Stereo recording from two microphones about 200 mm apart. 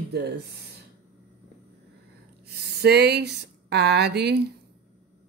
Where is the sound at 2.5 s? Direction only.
55° right (ahead or behind).